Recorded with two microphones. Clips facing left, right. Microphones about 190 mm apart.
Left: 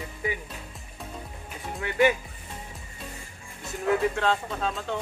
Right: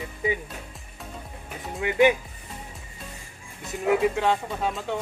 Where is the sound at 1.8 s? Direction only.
20° right (ahead or behind).